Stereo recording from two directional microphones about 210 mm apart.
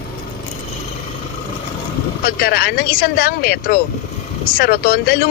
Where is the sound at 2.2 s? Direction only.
45° left (ahead or behind).